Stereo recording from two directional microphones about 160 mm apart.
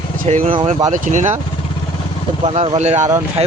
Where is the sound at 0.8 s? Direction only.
50° right (ahead or behind).